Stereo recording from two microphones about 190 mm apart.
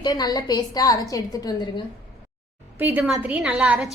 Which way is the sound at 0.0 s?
20° left (ahead or behind).